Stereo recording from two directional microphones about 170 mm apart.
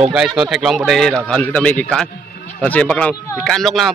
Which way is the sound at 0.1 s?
5° right (ahead or behind).